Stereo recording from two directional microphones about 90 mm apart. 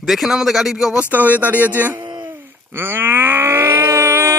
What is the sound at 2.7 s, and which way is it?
Wail, 25° right (ahead or behind).